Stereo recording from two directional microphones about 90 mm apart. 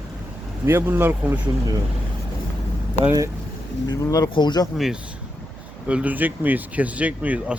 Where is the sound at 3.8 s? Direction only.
45° left (ahead or behind).